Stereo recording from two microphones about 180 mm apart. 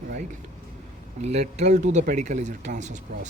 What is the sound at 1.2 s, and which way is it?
Speech, 40° right (ahead or behind).